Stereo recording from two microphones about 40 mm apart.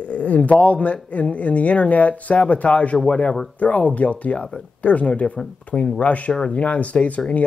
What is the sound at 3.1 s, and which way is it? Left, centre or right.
Speech, left.